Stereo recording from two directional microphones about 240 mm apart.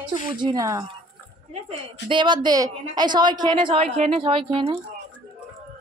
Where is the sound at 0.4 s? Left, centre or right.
Centre.